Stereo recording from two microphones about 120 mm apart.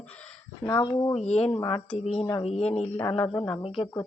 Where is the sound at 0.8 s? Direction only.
30° left (ahead or behind).